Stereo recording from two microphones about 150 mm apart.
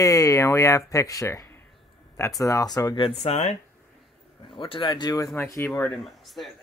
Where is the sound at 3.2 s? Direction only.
45° left (ahead or behind).